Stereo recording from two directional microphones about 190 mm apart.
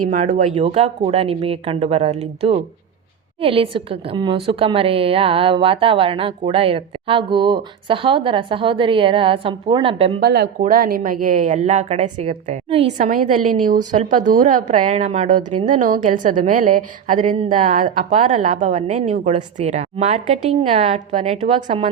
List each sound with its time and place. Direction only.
0.1 s a woman's voice: 40° right (ahead or behind)
10.2 s a woman's voice: 55° right (ahead or behind); by 21.8 s 30° right (ahead or behind)